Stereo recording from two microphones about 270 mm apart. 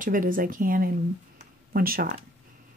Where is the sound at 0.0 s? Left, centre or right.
Right.